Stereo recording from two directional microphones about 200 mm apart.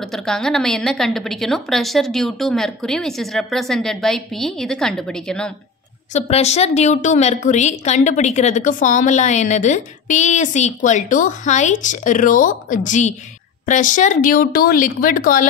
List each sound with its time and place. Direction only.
0.0 s a woman's voice: centre (ahead or behind)
6.1 s a woman's voice: 30° left (ahead or behind)